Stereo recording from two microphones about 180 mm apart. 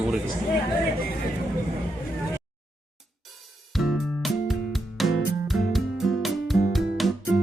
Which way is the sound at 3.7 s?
Centre (ahead or behind).